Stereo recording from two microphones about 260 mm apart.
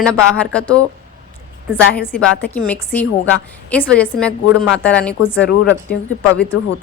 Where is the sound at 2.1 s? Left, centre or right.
Centre.